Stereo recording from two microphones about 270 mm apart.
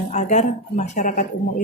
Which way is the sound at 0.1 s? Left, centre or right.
Left.